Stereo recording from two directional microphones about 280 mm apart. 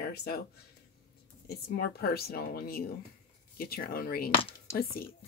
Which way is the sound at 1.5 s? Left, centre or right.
Left.